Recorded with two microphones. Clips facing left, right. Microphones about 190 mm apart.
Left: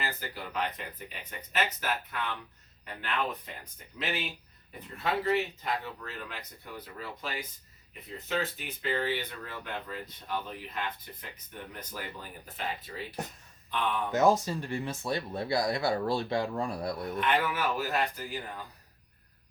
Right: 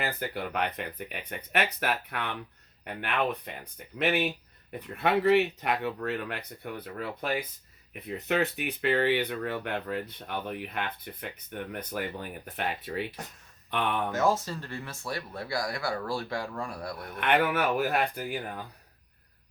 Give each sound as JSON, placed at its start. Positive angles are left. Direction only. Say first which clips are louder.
{"t": 0.0, "sound": "speech", "louder": "right 5 dB", "side_deg": -55}
{"t": 14.1, "sound": "speech", "louder": "left 6 dB", "side_deg": 15}
{"t": 17.2, "sound": "speech", "louder": "right 5 dB", "side_deg": -60}